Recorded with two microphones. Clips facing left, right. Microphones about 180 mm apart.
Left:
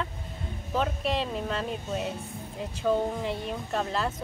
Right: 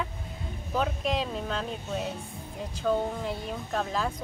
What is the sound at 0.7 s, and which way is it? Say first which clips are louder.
Speech: even; centre (ahead or behind).